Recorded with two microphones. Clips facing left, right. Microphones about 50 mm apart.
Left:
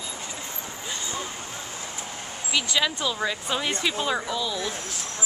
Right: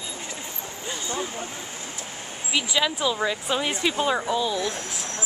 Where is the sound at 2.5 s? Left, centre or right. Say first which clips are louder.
Right 1 dB; centre.